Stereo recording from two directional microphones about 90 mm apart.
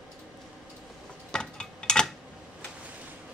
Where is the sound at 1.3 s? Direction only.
10° left (ahead or behind).